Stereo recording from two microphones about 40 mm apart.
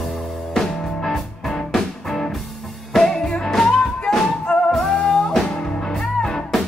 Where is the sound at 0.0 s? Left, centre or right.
Centre.